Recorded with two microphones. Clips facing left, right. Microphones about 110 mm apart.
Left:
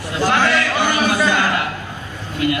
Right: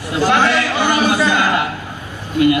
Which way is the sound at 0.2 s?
15° right (ahead or behind).